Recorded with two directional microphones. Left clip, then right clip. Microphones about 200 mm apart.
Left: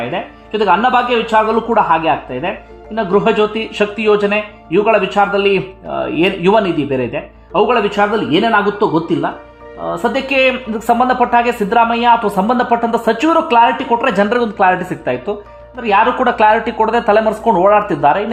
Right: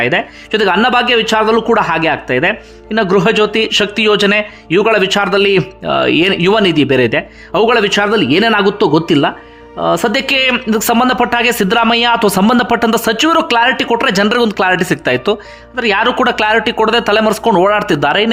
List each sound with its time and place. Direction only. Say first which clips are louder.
0.0 s speech: right 7 dB; 25° right (ahead or behind)